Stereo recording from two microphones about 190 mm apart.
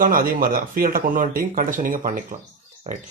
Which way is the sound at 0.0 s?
45° right (ahead or behind).